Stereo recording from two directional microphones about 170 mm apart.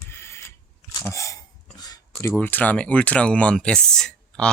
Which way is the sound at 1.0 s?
20° left (ahead or behind).